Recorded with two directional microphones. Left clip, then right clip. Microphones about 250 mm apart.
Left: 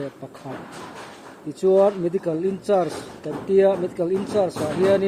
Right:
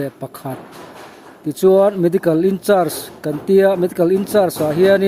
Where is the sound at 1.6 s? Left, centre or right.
Right.